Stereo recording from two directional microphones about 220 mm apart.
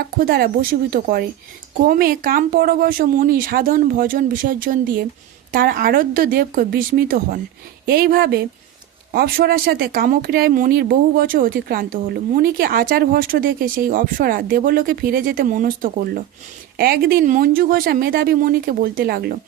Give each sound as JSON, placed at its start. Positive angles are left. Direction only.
{"t": 0.2, "sound": "speech", "side_deg": -45}